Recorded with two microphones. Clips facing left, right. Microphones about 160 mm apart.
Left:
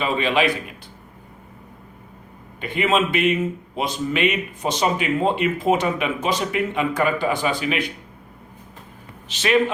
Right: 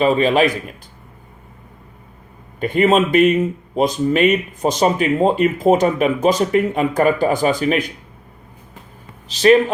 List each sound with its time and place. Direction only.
0.0 s speech: 40° right (ahead or behind)
2.6 s speech: 45° right (ahead or behind)
9.3 s speech: 35° right (ahead or behind)